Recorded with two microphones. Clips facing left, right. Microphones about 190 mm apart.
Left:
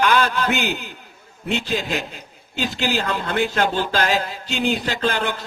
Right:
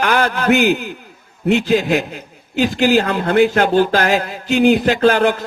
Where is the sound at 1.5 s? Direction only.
65° right (ahead or behind).